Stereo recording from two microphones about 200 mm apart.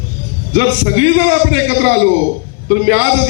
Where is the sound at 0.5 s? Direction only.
65° right (ahead or behind).